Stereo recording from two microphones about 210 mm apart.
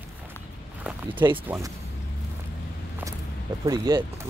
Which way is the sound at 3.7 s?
20° right (ahead or behind).